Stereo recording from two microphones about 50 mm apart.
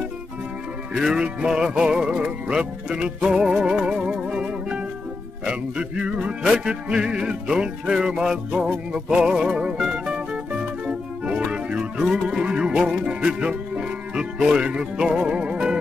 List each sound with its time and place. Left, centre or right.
0.9 s music: centre
2.9 s music: centre
5.4 s speech: centre
6.5 s music: centre